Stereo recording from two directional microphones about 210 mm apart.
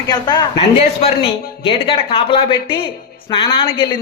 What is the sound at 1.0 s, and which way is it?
Speech, 30° left (ahead or behind).